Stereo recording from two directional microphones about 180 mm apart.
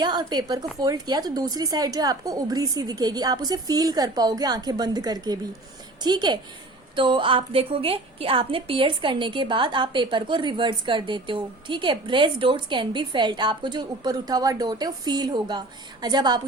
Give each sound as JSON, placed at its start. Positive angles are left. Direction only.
{"t": 0.0, "sound": "a woman's voice", "side_deg": -25}